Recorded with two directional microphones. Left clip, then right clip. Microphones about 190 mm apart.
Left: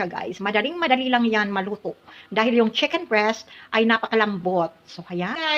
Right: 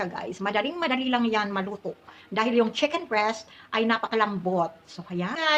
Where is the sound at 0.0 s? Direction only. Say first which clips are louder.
Left 4 dB; 25° left (ahead or behind).